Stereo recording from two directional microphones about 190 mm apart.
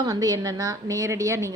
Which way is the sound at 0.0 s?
20° right (ahead or behind).